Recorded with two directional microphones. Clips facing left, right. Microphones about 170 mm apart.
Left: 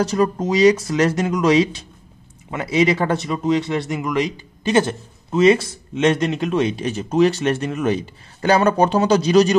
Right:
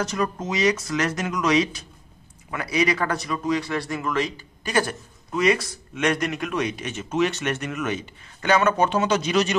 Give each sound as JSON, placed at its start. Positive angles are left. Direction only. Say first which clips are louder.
{"t": 0.0, "sound": "speech", "louder": "left 7 dB", "side_deg": 30}